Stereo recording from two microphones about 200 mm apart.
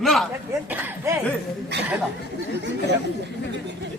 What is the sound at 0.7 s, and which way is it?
Speech, 10° right (ahead or behind).